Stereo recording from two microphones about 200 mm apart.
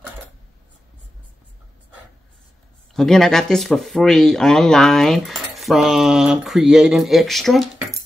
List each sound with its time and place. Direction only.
2.9 s speech: centre (ahead or behind)